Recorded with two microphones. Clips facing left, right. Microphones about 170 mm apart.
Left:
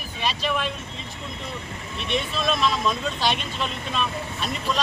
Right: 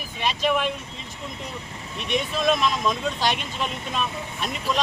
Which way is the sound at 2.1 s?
15° right (ahead or behind).